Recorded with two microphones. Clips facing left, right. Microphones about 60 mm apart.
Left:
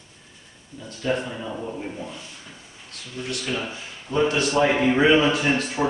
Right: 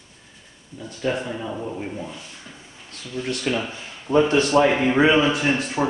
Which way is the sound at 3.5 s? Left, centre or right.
Right.